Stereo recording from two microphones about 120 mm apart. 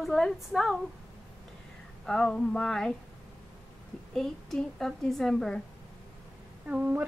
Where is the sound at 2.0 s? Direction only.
5° left (ahead or behind).